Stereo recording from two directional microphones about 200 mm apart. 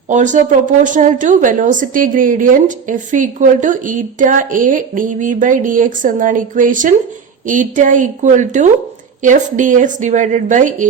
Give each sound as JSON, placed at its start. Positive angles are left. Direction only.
{"t": 0.1, "sound": "a woman's voice", "side_deg": -40}